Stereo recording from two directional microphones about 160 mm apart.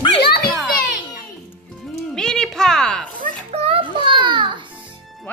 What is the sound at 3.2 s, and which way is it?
Children playing, 40° right (ahead or behind).